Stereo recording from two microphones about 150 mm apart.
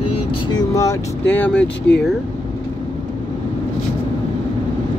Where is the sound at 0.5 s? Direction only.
25° left (ahead or behind).